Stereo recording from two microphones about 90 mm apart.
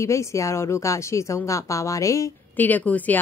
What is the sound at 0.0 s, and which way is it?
Speech, 35° left (ahead or behind).